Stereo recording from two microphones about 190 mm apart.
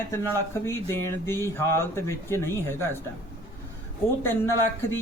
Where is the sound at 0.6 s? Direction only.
15° left (ahead or behind).